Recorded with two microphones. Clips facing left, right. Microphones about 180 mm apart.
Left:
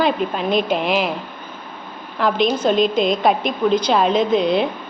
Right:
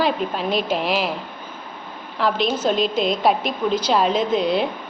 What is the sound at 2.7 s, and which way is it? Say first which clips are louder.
Speech: left 4 dB; 50° left (ahead or behind).